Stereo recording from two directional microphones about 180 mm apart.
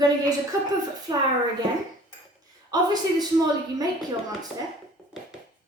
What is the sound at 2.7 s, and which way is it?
Speech, 20° right (ahead or behind).